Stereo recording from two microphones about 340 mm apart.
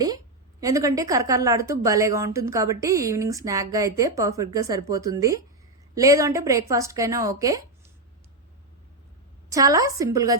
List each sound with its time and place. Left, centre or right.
0.6 s speech: centre
9.5 s speech: centre